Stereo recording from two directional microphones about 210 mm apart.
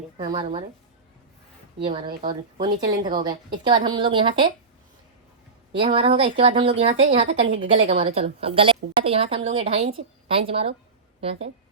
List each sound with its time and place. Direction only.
0.2 s a woman's voice: 20° right (ahead or behind)
1.8 s a woman's voice: 25° right (ahead or behind)
5.7 s a woman's voice: 25° right (ahead or behind)